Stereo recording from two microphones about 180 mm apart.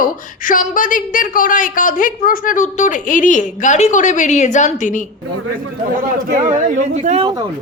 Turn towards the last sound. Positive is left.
turn(degrees=-40)  # may be behind; listen again after turning